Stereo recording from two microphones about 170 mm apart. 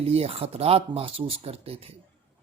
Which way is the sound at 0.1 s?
35° right (ahead or behind).